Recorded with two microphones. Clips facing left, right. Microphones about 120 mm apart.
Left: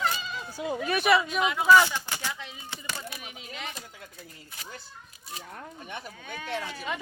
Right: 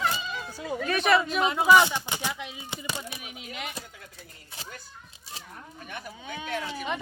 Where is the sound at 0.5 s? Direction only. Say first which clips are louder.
Left 1 dB; 15° left (ahead or behind).